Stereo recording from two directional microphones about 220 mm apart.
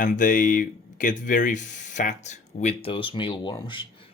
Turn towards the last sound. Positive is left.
turn(degrees=20)  # may be behind; listen again after turning